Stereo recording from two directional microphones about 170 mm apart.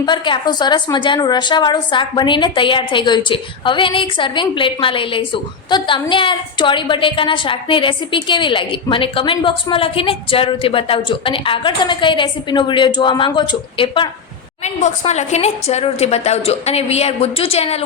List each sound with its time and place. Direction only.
0.0 s a woman's voice: 25° left (ahead or behind)
14.6 s a woman's voice: 45° left (ahead or behind)